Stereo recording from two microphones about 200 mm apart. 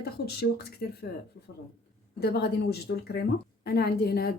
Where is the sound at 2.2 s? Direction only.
55° left (ahead or behind).